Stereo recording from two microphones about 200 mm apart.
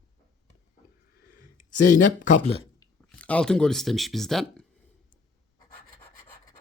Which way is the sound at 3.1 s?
5° left (ahead or behind).